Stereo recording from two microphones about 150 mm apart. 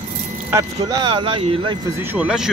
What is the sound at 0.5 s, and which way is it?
Speech, 25° right (ahead or behind).